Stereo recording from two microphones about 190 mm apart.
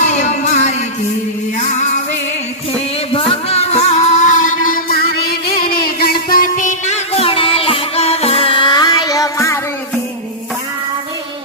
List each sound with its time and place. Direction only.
0.0 s music: 40° left (ahead or behind); by 9.6 s 15° left (ahead or behind)